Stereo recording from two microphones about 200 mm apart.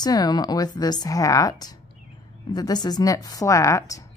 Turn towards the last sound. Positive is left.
turn(degrees=15)  # may be behind; listen again after turning